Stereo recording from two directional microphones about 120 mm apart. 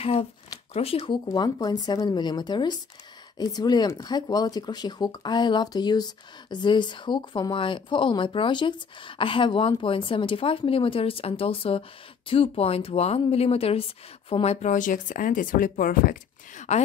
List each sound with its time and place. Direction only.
0.0 s a woman's voice: 55° left (ahead or behind)
1.1 s a woman's voice: 35° left (ahead or behind); by 15.5 s 90° left
16.5 s speech: 75° left (ahead or behind)